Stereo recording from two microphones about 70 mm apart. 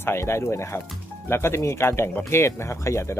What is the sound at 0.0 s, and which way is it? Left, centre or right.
Speech, left.